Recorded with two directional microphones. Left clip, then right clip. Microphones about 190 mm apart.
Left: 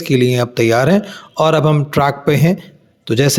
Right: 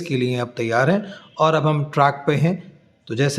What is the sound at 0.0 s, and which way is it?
Speech, 30° left (ahead or behind).